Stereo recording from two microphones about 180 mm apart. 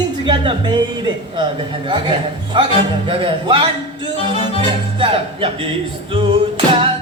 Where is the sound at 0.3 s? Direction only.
25° right (ahead or behind).